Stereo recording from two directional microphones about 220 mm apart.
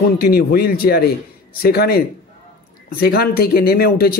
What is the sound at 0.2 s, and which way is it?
A man's voice, 45° left (ahead or behind).